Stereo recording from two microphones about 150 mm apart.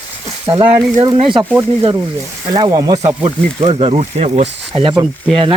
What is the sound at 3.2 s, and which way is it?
Speech, 40° right (ahead or behind).